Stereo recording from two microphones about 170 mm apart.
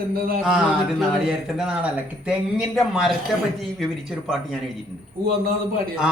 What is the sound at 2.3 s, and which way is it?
Speech, centre (ahead or behind).